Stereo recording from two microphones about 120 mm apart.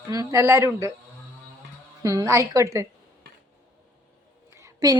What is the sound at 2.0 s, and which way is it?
Speech, 30° right (ahead or behind).